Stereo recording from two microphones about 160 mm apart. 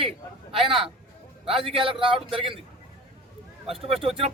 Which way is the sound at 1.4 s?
35° right (ahead or behind).